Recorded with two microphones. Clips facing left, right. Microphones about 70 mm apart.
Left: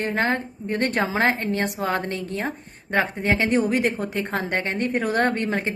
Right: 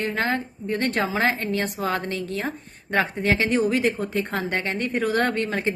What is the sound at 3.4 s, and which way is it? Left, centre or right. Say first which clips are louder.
Speech: left 2 dB; left.